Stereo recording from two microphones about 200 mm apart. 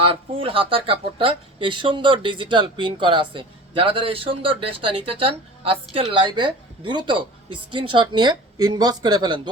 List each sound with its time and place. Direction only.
0.0 s speech: 30° right (ahead or behind)